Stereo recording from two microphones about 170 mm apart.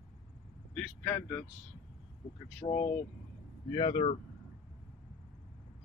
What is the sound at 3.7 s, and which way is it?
Speech, 30° left (ahead or behind).